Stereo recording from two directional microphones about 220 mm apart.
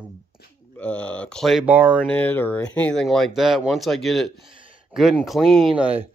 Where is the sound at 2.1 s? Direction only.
10° left (ahead or behind).